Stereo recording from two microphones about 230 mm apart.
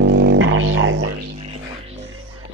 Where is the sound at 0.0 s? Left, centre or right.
Right.